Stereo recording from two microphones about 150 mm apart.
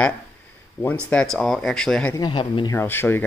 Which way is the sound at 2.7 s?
15° left (ahead or behind).